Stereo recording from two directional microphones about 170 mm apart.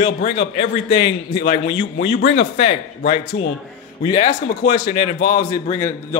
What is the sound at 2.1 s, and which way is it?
Speech, 80° left.